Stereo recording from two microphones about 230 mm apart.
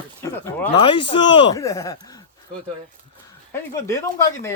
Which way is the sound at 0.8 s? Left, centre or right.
Left.